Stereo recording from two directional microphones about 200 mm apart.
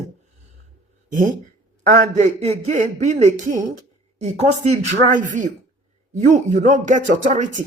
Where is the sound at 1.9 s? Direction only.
40° right (ahead or behind).